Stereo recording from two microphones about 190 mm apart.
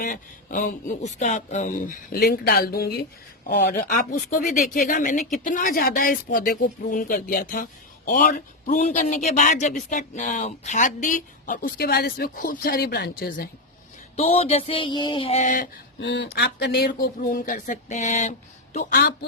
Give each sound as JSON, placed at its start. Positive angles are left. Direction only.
{"t": 0.0, "sound": "speech", "side_deg": 45}
{"t": 14.2, "sound": "a sound", "side_deg": 30}
{"t": 16.0, "sound": "speech", "side_deg": 65}